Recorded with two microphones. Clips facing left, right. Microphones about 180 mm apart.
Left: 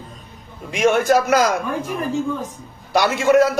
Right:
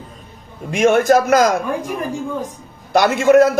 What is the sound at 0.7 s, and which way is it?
Speech, 50° right (ahead or behind).